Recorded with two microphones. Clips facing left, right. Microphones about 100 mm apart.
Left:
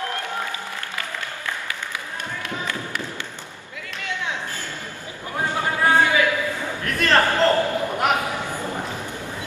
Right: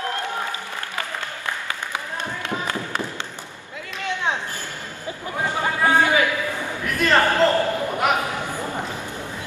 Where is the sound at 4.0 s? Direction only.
20° right (ahead or behind).